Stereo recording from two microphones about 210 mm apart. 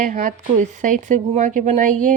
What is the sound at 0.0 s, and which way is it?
Speech, 40° right (ahead or behind).